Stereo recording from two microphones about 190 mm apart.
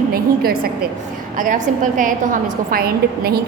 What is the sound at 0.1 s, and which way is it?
A woman's voice, 50° right (ahead or behind).